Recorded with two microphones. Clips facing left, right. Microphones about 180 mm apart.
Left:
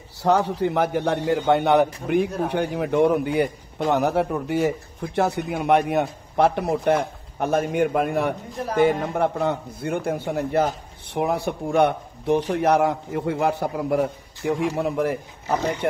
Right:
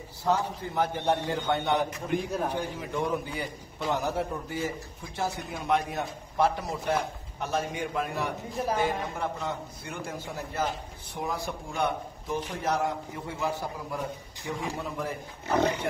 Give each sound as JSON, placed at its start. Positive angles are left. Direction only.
{"t": 0.2, "sound": "a man's voice", "side_deg": 75}